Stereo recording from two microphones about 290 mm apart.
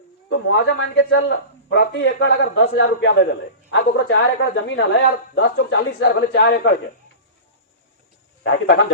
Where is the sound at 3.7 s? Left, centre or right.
Left.